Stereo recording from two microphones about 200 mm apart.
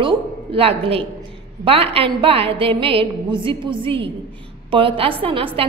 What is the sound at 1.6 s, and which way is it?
A woman's voice, 30° right (ahead or behind).